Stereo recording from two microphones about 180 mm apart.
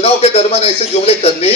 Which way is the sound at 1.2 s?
35° left (ahead or behind).